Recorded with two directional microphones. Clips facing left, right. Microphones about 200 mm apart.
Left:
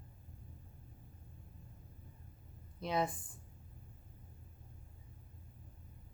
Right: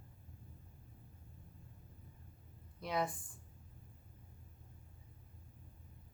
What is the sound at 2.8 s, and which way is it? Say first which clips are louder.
Speech: left 2 dB; 25° left (ahead or behind).